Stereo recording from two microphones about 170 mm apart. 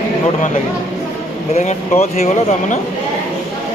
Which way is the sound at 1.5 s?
40° left (ahead or behind).